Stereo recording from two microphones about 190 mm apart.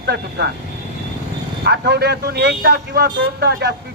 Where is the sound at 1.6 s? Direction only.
60° right (ahead or behind).